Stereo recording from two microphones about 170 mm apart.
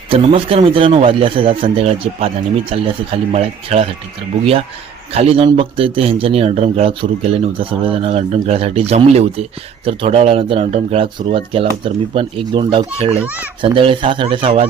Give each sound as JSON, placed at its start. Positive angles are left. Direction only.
{"t": 0.1, "sound": "a man's voice", "side_deg": -35}
{"t": 5.1, "sound": "a man's voice", "side_deg": -35}